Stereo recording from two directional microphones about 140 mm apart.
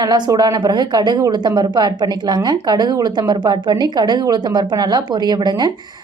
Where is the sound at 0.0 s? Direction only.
30° right (ahead or behind).